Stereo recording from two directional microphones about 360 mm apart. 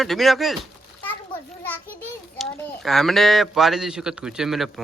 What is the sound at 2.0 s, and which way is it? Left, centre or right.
A child's voice, centre.